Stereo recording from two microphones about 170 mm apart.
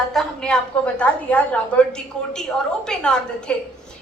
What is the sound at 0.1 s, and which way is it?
A woman's voice, 5° left (ahead or behind).